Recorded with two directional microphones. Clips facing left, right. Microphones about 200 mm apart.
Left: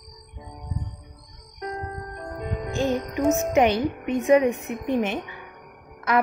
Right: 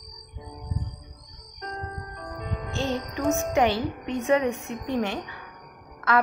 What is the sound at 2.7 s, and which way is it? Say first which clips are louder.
A woman's voice: left 4 dB; 15° left (ahead or behind).